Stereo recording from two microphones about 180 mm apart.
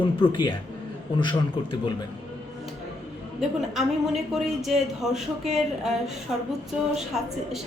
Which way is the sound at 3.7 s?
Centre (ahead or behind).